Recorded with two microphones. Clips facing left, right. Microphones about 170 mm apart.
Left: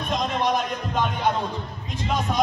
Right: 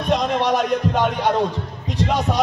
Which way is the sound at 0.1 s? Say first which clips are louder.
Right 5 dB; 75° right (ahead or behind).